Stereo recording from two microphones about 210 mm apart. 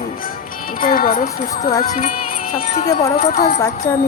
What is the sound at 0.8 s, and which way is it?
Speech, 40° left (ahead or behind).